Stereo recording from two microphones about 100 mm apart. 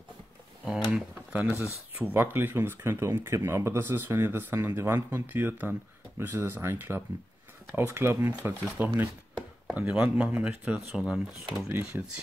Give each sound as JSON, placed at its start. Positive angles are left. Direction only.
{"t": 0.9, "sound": "a man's voice", "side_deg": -15}
{"t": 8.3, "sound": "a man's voice", "side_deg": -15}
{"t": 9.7, "sound": "speech", "side_deg": -10}